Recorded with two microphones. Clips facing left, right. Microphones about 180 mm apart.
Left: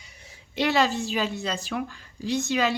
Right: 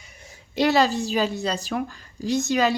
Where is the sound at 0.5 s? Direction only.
40° right (ahead or behind).